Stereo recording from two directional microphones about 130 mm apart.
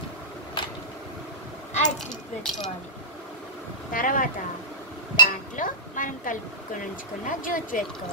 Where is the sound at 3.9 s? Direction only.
90° left.